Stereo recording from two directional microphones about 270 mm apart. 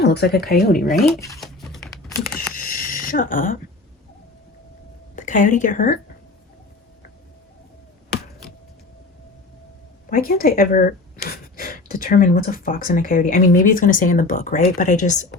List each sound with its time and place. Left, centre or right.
0.0 s speech: left
1.4 s computer keyboard: centre
2.6 s owl: left
5.1 s a woman's voice: left
8.1 s a sound: centre
10.1 s speech: left